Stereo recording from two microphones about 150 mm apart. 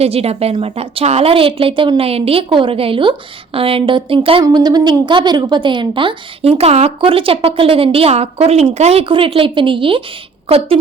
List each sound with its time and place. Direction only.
0.0 s a woman's voice: 40° right (ahead or behind)